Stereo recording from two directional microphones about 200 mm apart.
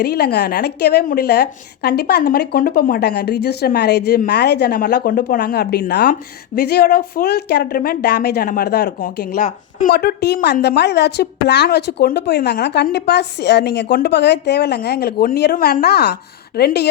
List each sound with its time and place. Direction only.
0.0 s a woman's voice: 55° left (ahead or behind)